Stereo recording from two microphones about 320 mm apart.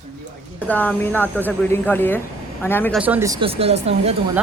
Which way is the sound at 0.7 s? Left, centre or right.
Centre.